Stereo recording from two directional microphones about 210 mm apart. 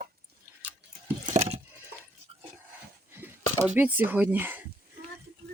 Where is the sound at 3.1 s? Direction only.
10° right (ahead or behind).